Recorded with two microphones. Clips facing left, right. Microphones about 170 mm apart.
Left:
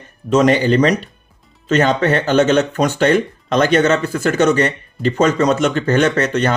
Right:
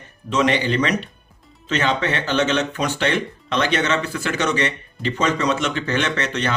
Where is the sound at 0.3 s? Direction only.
45° left (ahead or behind).